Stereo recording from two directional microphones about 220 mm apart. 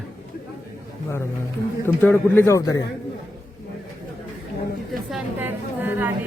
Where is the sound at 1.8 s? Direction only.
10° left (ahead or behind).